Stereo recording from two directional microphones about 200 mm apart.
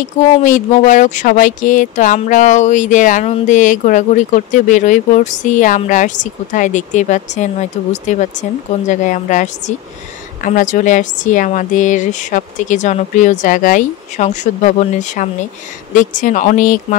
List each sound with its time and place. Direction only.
0.4 s speech: 40° left (ahead or behind)